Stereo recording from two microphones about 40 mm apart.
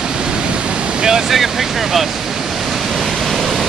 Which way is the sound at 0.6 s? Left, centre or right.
Centre.